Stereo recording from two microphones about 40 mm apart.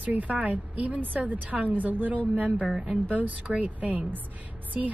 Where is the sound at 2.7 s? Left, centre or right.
Centre.